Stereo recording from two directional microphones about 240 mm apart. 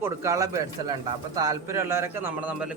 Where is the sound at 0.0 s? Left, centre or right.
Centre.